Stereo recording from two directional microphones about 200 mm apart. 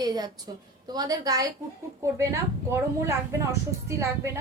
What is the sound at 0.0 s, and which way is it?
A woman's voice, 20° right (ahead or behind).